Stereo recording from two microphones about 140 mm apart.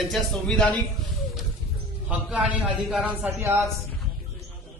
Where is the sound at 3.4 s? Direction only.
20° right (ahead or behind).